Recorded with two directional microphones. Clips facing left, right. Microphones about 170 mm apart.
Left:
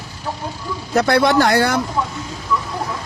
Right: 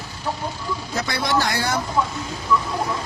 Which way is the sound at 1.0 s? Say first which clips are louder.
Left 9 dB; 60° left (ahead or behind).